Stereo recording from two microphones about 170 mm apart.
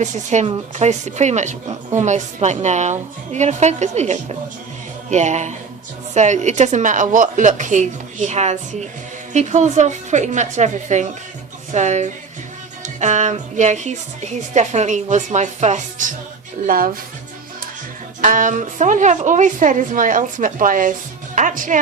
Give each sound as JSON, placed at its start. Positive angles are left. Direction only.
{"t": 0.0, "sound": "a woman's voice", "side_deg": -45}
{"t": 18.2, "sound": "a woman's voice", "side_deg": -50}